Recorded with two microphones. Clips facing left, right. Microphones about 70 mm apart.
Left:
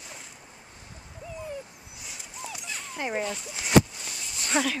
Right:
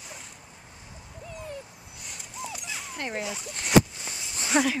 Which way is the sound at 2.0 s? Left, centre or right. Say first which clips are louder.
Right 2 dB; centre.